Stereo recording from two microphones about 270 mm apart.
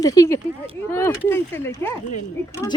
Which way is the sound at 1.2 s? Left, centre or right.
Centre.